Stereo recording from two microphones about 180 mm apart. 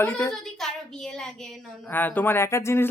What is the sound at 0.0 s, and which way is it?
Speech, 5° left (ahead or behind).